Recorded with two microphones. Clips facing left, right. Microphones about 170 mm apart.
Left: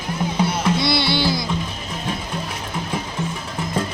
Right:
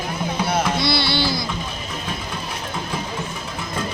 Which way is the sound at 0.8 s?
20° left (ahead or behind).